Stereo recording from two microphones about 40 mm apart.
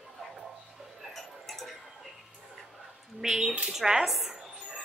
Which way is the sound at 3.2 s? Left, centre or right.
Centre.